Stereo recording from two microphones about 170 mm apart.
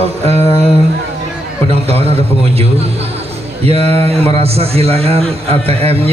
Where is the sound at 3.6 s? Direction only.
35° right (ahead or behind).